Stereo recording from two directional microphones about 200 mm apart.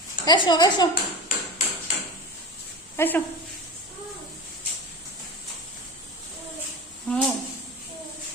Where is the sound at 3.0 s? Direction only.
10° left (ahead or behind).